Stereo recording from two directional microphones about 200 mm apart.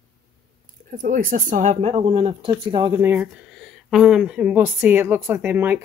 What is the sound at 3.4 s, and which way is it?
A woman's voice, centre (ahead or behind).